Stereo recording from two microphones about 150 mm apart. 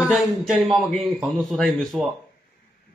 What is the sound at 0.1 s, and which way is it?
Speech, centre (ahead or behind).